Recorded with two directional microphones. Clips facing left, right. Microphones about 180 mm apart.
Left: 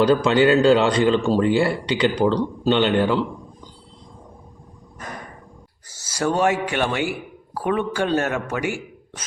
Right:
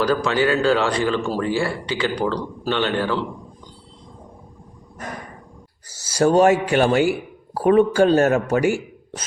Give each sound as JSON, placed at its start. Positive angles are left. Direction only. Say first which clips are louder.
{"t": 0.0, "sound": "a man's voice", "louder": "left 3 dB", "side_deg": 20}
{"t": 6.1, "sound": "speech", "louder": "right 5 dB", "side_deg": -35}